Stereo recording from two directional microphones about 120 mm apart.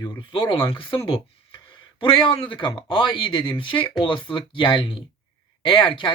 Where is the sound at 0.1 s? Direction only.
40° left (ahead or behind).